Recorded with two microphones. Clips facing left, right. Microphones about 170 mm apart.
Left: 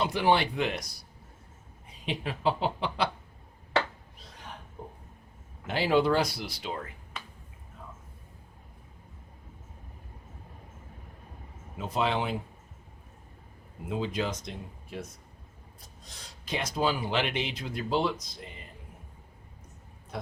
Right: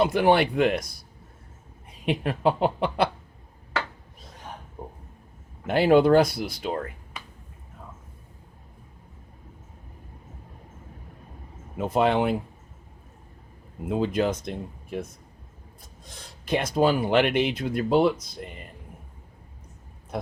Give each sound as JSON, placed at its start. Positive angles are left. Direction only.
{"t": 0.0, "sound": "speech", "side_deg": -55}
{"t": 2.0, "sound": "speech", "side_deg": -55}
{"t": 4.8, "sound": "a sound", "side_deg": -50}
{"t": 5.6, "sound": "speech", "side_deg": -55}
{"t": 11.8, "sound": "speech", "side_deg": -55}
{"t": 13.8, "sound": "speech", "side_deg": -55}
{"t": 16.5, "sound": "speech", "side_deg": -55}